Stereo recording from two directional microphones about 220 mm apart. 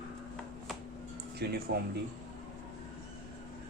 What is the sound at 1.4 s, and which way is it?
Speech, 50° right (ahead or behind).